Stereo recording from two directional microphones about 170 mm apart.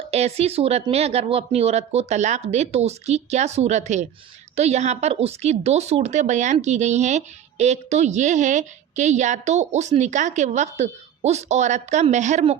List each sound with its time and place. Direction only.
0.1 s speech: 40° right (ahead or behind)